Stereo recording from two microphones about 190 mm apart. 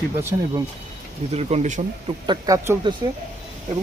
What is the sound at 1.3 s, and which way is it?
Speech, 35° right (ahead or behind).